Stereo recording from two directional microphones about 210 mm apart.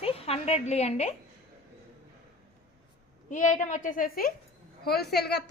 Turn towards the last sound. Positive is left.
turn(degrees=50)  # may be behind; listen again after turning